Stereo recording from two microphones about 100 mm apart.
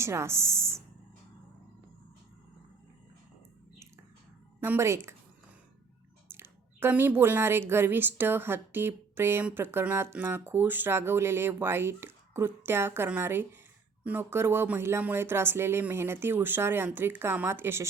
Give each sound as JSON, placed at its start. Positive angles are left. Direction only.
{"t": 0.0, "sound": "speech", "side_deg": -25}
{"t": 4.6, "sound": "speech", "side_deg": -25}
{"t": 6.3, "sound": "a sound", "side_deg": -20}
{"t": 7.7, "sound": "speech", "side_deg": -20}